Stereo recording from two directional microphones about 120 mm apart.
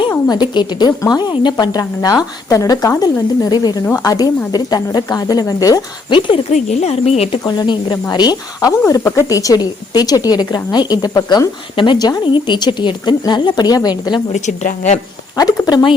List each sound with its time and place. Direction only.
0.3 s speech: 40° left (ahead or behind)
6.1 s speech: 45° left (ahead or behind)
6.5 s speech: 75° left (ahead or behind)
7.4 s speech: 35° left (ahead or behind)
14.3 s a woman's voice: 85° left
15.4 s speech: 30° left (ahead or behind)